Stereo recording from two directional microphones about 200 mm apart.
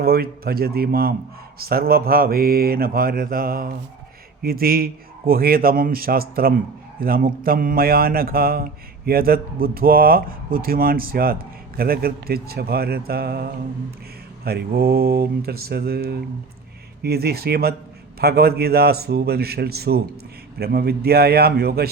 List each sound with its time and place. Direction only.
0.0 s speech: 50° right (ahead or behind)